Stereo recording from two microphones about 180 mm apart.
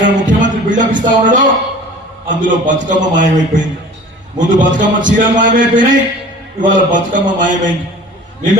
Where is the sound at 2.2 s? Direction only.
45° right (ahead or behind).